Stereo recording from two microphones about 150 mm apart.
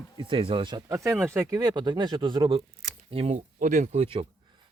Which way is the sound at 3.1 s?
45° right (ahead or behind).